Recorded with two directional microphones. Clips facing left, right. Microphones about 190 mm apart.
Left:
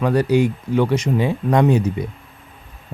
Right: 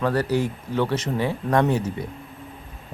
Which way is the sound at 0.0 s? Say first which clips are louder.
Left 6 dB; 15° left (ahead or behind).